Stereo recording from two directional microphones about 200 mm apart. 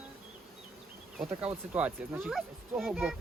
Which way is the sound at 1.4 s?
5° right (ahead or behind).